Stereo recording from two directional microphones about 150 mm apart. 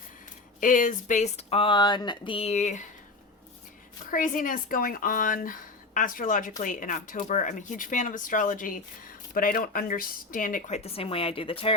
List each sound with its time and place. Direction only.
0.6 s speech: 60° left (ahead or behind)
4.1 s speech: 65° left (ahead or behind)
10.8 s a woman's voice: 40° left (ahead or behind)